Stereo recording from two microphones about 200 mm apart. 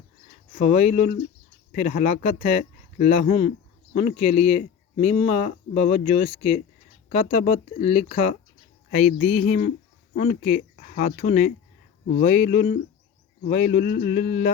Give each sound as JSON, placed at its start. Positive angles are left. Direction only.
{"t": 0.5, "sound": "speech", "side_deg": 35}